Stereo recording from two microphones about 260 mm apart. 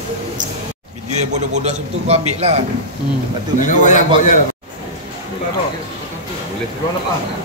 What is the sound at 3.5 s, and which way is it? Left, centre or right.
Speech, left.